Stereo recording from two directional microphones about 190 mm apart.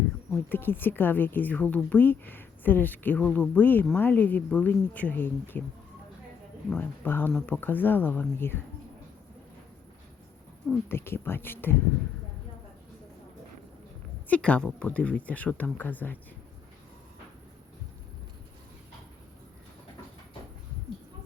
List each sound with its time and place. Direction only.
0.4 s speech: 10° left (ahead or behind)
6.7 s speech: 10° left (ahead or behind)
10.8 s speech: 10° left (ahead or behind)
14.3 s speech: 5° left (ahead or behind)